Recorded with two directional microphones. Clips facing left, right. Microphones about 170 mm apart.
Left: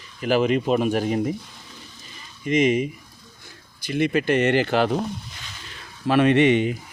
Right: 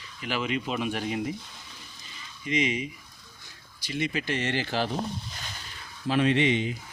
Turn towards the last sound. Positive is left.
turn(degrees=60)  # may be behind; listen again after turning